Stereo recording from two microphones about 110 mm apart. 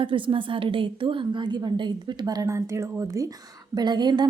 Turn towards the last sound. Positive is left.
turn(degrees=-40)  # may be behind; listen again after turning